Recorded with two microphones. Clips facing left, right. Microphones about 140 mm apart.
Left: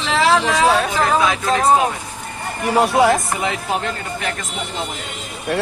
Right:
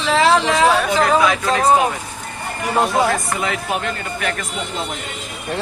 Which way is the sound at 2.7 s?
15° left (ahead or behind).